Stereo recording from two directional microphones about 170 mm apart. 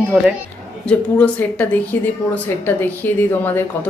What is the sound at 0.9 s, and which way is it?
A woman's voice, 10° left (ahead or behind).